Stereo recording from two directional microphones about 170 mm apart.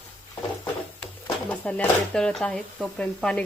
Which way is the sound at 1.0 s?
5° left (ahead or behind).